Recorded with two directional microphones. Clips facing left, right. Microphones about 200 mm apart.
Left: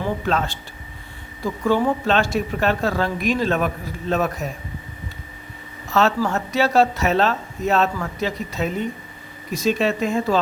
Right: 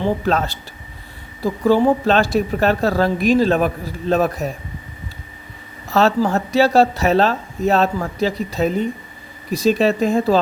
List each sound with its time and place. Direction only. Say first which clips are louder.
0.0 s speech: right 4 dB; 40° right (ahead or behind)
5.9 s speech: right 3 dB; 35° right (ahead or behind)